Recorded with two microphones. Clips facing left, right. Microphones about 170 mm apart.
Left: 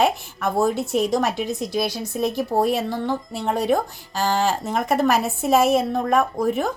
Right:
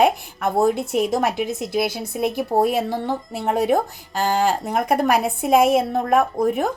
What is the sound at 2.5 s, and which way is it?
Speech, 25° right (ahead or behind).